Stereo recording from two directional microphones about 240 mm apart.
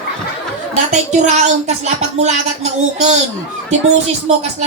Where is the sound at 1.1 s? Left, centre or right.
Right.